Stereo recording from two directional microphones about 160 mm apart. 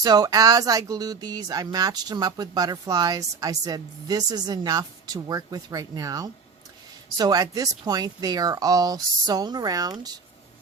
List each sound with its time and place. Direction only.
0.0 s speech: 25° right (ahead or behind)